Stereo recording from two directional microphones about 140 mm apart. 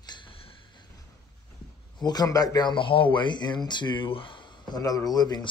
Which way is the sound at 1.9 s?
30° left (ahead or behind).